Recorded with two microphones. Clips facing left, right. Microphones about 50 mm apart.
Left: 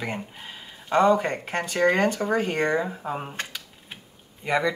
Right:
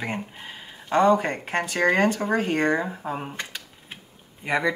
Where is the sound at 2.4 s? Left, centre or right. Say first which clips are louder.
Right 1 dB; centre.